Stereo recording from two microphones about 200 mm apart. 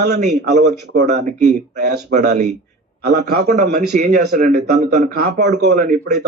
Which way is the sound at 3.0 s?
55° right (ahead or behind).